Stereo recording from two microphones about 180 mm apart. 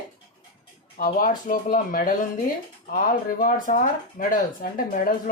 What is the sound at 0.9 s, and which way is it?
Speech, 50° left (ahead or behind).